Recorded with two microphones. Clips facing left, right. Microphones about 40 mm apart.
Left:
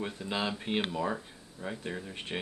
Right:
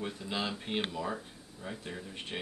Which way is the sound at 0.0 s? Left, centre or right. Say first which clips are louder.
Left 2 dB; centre.